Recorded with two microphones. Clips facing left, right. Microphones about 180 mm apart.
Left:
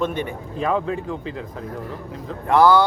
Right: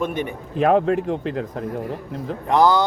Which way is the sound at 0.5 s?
70° right (ahead or behind).